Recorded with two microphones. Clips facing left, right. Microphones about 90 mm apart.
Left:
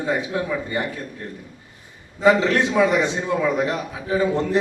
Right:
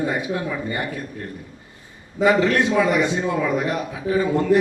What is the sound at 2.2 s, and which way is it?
Speech, 25° left (ahead or behind).